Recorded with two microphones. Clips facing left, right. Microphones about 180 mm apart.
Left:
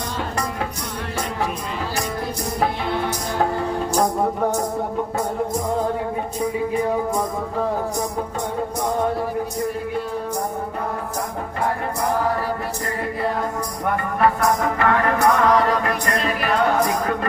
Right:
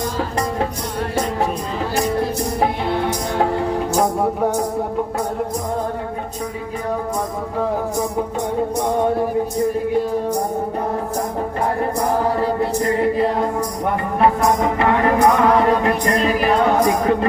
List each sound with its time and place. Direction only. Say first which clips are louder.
3.9 s music: right 1 dB; 10° right (ahead or behind)
12.4 s music: right 7 dB; 25° right (ahead or behind)
15.6 s a capella: right 5 dB; 30° right (ahead or behind)
16.8 s music: right 5 dB; 25° right (ahead or behind)